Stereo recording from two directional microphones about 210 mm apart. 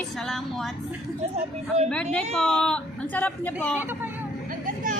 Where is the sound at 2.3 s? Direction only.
5° left (ahead or behind).